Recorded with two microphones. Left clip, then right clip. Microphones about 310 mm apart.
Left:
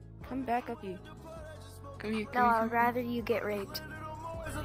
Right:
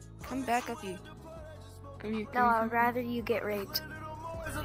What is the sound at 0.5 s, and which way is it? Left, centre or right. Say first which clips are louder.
Speech: right 2 dB; centre.